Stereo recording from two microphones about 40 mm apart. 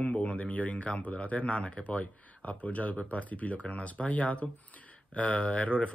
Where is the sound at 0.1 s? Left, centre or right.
Left.